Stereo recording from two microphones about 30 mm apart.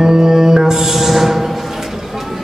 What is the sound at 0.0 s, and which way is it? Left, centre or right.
Music, centre.